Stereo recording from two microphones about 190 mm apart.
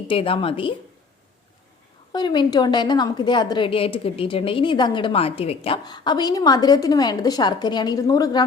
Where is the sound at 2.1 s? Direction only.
25° left (ahead or behind).